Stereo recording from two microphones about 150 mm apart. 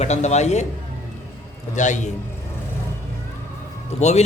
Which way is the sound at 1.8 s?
55° left (ahead or behind).